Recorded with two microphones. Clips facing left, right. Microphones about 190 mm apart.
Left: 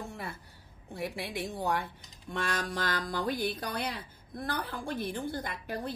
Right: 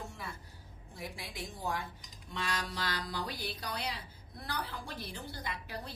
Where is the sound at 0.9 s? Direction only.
65° left (ahead or behind).